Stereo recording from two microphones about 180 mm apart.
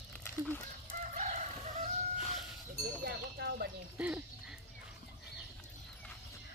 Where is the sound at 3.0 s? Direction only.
65° right (ahead or behind).